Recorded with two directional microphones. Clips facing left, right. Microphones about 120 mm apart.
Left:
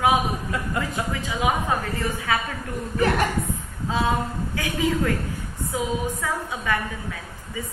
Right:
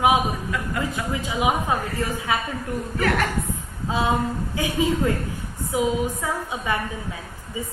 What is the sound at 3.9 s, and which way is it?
A woman's voice, 20° right (ahead or behind).